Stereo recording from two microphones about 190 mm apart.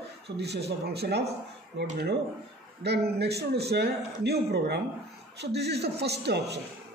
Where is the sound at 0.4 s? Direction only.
60° right (ahead or behind).